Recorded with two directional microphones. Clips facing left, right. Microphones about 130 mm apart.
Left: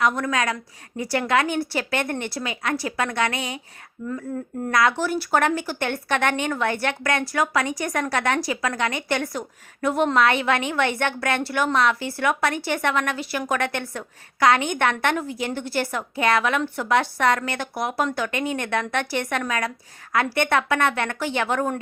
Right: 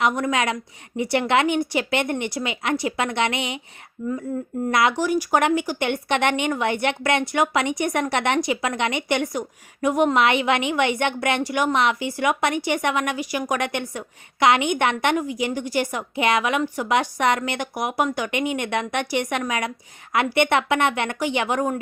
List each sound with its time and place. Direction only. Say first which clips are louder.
0.0 s speech: right 1 dB; 20° right (ahead or behind)
4.0 s a woman's voice: right 3 dB; 5° right (ahead or behind)
4.7 s a woman's voice: right 1 dB; 20° right (ahead or behind)